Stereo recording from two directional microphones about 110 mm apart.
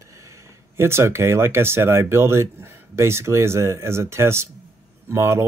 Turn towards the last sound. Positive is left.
turn(degrees=-20)  # may be behind; listen again after turning